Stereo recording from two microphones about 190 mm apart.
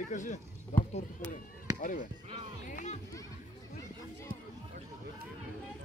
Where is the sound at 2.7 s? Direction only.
40° left (ahead or behind).